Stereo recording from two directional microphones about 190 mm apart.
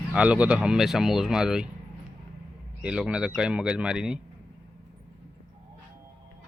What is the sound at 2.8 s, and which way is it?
Speech, 5° right (ahead or behind).